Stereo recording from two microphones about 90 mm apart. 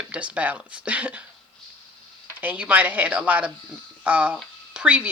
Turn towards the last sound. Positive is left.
turn(degrees=-15)  # may be behind; listen again after turning